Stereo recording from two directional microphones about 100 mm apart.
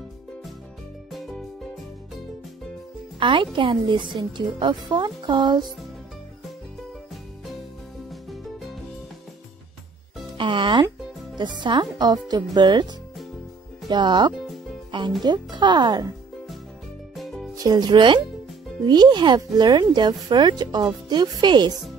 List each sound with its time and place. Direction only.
1.1 s music: 5° left (ahead or behind)
3.2 s a woman's voice: 55° right (ahead or behind)
10.3 s a woman's voice: 55° right (ahead or behind)
13.8 s a woman's voice: 50° right (ahead or behind)
14.3 s music: centre (ahead or behind)
14.9 s music: 50° right (ahead or behind)
15.2 s a woman's voice: 50° right (ahead or behind)
17.1 s music: centre (ahead or behind)
17.6 s a woman's voice: 45° right (ahead or behind)